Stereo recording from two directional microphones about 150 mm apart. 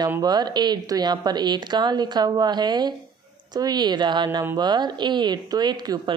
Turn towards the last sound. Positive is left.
turn(degrees=-30)  # may be behind; listen again after turning